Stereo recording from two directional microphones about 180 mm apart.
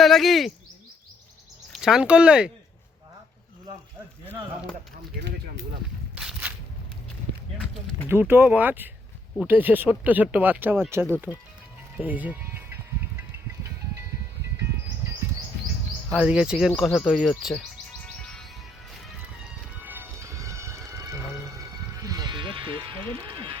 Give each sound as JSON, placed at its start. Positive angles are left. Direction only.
{"t": 0.0, "sound": "speech", "side_deg": 0}
{"t": 1.7, "sound": "speech", "side_deg": -5}
{"t": 6.1, "sound": "a sound", "side_deg": -5}
{"t": 8.0, "sound": "speech", "side_deg": -10}
{"t": 11.9, "sound": "music", "side_deg": -10}
{"t": 16.1, "sound": "speech", "side_deg": -5}
{"t": 18.2, "sound": "music", "side_deg": 5}
{"t": 19.8, "sound": "music", "side_deg": -10}